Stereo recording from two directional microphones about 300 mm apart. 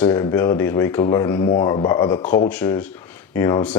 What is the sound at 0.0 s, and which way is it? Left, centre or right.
Speech, centre.